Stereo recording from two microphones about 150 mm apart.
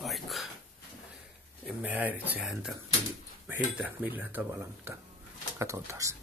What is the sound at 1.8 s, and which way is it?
Speech, 10° right (ahead or behind).